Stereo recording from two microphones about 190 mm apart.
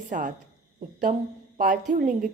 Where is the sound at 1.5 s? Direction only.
45° right (ahead or behind).